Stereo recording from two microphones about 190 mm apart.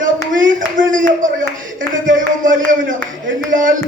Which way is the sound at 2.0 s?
45° right (ahead or behind).